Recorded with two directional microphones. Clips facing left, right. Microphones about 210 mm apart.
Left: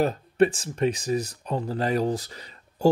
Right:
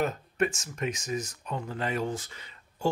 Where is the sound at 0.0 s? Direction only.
35° left (ahead or behind).